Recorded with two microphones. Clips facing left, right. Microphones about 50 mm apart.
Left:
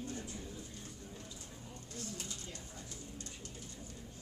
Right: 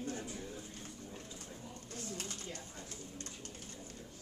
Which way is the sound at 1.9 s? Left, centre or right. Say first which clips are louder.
Right 1 dB; right.